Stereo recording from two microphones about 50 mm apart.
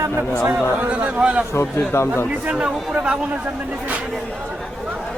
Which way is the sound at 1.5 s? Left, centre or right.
Left.